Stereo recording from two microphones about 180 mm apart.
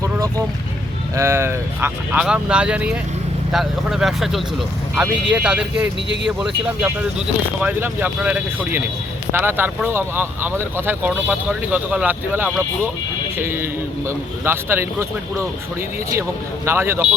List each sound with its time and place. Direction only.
0.0 s a sound: 20° right (ahead or behind)
1.1 s speech: 15° right (ahead or behind)
16.6 s speech: 15° right (ahead or behind)